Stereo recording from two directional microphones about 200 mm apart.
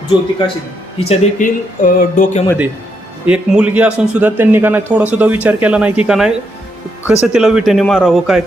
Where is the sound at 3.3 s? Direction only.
5° right (ahead or behind).